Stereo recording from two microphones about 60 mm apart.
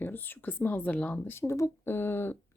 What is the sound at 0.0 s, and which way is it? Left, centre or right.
Speech, left.